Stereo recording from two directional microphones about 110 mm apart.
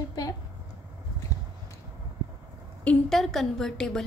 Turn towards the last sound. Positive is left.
turn(degrees=5)  # may be behind; listen again after turning